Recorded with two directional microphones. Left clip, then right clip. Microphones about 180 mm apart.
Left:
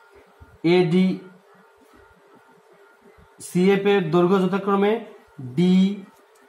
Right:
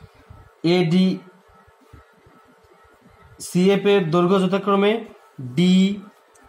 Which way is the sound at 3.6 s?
30° right (ahead or behind).